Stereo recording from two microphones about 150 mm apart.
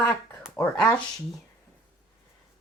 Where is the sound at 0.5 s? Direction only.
10° left (ahead or behind).